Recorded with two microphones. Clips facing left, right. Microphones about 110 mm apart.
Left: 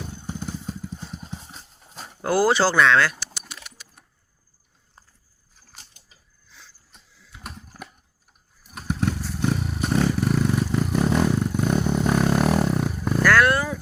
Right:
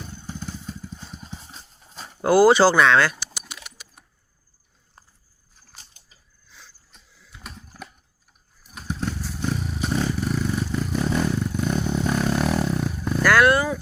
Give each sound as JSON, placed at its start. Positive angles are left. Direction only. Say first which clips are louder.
{"t": 0.1, "sound": "motorcycle", "louder": "left 2 dB", "side_deg": 15}
{"t": 1.0, "sound": "horse", "louder": "left 3 dB", "side_deg": 15}
{"t": 2.2, "sound": "speech", "louder": "right 5 dB", "side_deg": -5}
{"t": 3.3, "sound": "bird", "louder": "right 1 dB", "side_deg": -5}
{"t": 7.2, "sound": "typing", "louder": "left 2 dB", "side_deg": 5}
{"t": 8.7, "sound": "motorcycle", "louder": "left 4 dB", "side_deg": 15}
{"t": 9.4, "sound": "vehicle", "louder": "left 2 dB", "side_deg": 10}
{"t": 13.2, "sound": "vehicle", "louder": "right 2 dB", "side_deg": -5}